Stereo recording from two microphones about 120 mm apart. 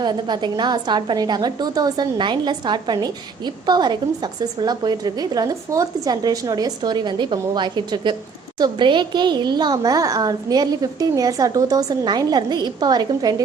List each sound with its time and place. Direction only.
0.0 s a woman's voice: 35° right (ahead or behind)